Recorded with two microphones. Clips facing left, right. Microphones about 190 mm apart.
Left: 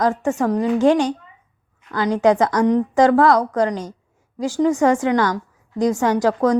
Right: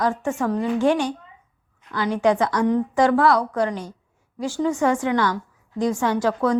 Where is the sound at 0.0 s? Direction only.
40° left (ahead or behind).